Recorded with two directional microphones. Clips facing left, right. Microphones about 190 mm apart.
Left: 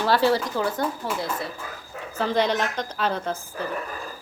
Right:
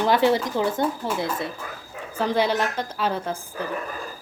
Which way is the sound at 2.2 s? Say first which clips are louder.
Right 1 dB; 10° right (ahead or behind).